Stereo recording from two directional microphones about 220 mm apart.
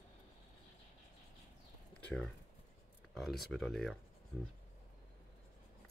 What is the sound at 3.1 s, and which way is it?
Speech, centre (ahead or behind).